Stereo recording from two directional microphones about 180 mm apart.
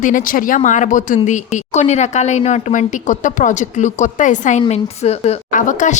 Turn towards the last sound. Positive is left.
turn(degrees=45)  # may be behind; listen again after turning